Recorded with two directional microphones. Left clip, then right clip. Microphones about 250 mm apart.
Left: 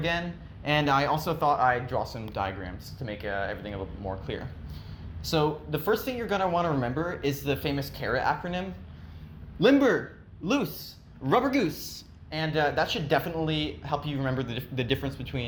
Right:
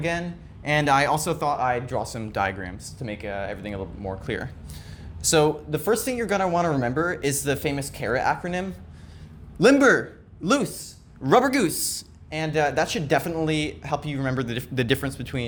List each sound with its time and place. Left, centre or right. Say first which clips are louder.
0.0 s a man's voice: right 2 dB; right